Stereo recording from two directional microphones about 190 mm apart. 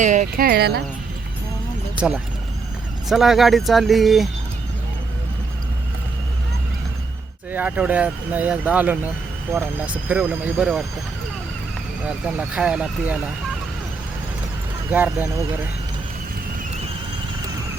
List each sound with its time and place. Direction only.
0.0 s speech: 40° right (ahead or behind); by 0.8 s 55° right (ahead or behind)
2.0 s speech: centre (ahead or behind)
7.5 s speech: 10° right (ahead or behind)
12.0 s speech: 5° right (ahead or behind)
14.8 s speech: 10° right (ahead or behind)